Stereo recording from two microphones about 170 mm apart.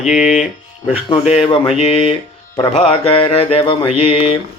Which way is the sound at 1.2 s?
35° left (ahead or behind).